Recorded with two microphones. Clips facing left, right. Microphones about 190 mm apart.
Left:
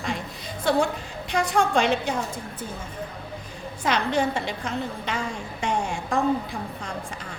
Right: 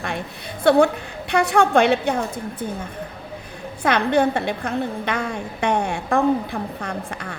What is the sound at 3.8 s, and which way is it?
A woman's voice, 60° right (ahead or behind).